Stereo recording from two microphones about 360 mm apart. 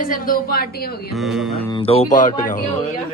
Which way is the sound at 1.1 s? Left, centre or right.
Centre.